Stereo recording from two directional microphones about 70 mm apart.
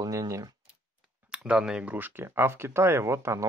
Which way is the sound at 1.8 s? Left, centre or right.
Right.